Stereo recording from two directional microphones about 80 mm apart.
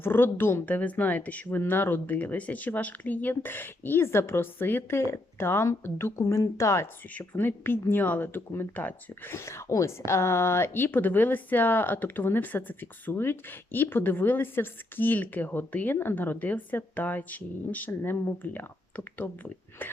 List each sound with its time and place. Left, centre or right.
0.0 s a woman's voice: left
7.1 s a woman's voice: left